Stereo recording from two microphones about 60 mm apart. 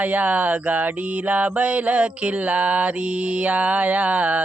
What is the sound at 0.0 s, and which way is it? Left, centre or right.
Mantra, right.